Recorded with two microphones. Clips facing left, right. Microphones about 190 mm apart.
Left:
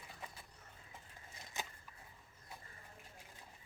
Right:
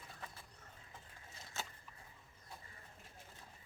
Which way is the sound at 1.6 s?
15° left (ahead or behind).